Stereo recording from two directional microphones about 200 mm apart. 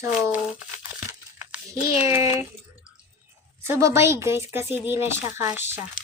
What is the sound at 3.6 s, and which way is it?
Speech, 15° right (ahead or behind).